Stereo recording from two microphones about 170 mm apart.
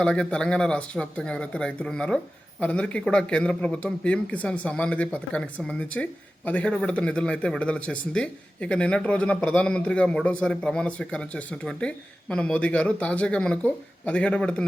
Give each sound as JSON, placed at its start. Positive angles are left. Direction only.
{"t": 0.0, "sound": "a man's voice", "side_deg": 5}